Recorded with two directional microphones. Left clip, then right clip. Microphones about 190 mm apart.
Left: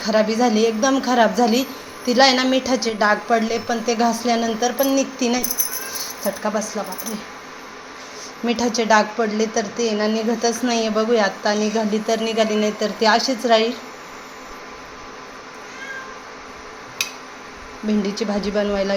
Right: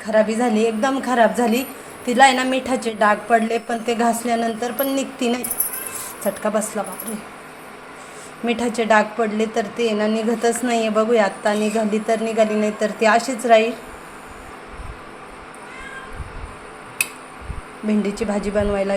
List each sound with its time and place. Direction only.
0.0 s a woman's voice: 10° left (ahead or behind)
6.2 s speech: 15° right (ahead or behind)
8.8 s a woman's voice: centre (ahead or behind)
17.8 s a woman's voice: centre (ahead or behind)